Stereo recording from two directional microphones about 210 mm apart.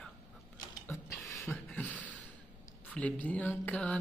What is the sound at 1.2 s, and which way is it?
Beatboxing, 15° left (ahead or behind).